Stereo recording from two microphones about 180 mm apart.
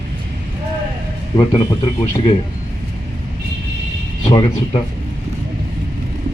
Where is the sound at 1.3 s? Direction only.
30° left (ahead or behind).